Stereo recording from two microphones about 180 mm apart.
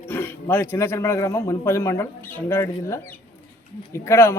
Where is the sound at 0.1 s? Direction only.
10° left (ahead or behind).